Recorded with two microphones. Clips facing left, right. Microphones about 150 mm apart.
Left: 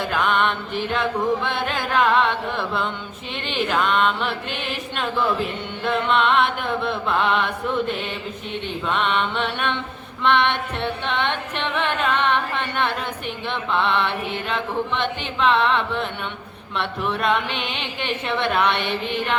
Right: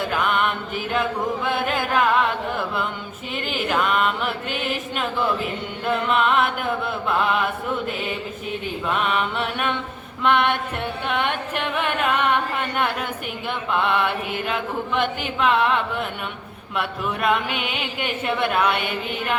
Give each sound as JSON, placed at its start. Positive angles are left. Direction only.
{"t": 0.3, "sound": "music", "side_deg": -5}
{"t": 3.4, "sound": "mantra", "side_deg": -5}
{"t": 9.0, "sound": "music", "side_deg": -5}